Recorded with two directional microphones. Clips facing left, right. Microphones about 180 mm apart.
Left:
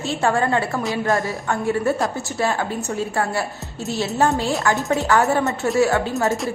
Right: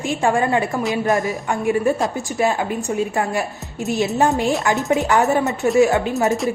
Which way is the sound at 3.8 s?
15° right (ahead or behind).